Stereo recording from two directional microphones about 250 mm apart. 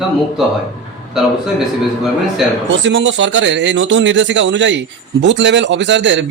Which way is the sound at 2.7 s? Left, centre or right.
Right.